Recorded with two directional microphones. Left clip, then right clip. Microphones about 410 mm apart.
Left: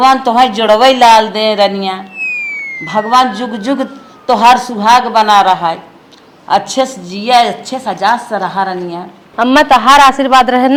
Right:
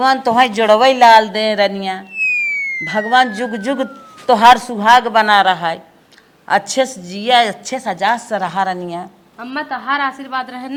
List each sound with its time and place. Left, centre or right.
0.1 s speech: centre
2.2 s a sound: centre
2.8 s a woman's voice: right
9.3 s a man's voice: left